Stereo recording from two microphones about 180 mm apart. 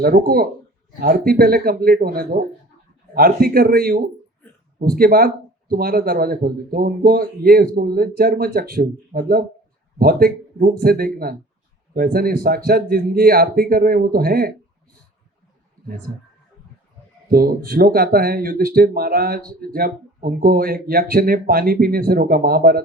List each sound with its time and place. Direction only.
0.0 s speech: 55° right (ahead or behind)
17.3 s speech: 55° right (ahead or behind)